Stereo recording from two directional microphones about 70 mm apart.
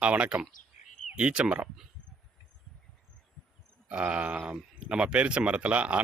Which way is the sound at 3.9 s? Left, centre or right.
Centre.